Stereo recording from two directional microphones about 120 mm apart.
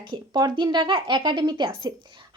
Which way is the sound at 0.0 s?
40° right (ahead or behind).